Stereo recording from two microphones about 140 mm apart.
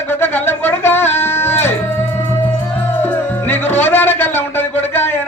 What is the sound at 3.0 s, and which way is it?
Music, 15° left (ahead or behind).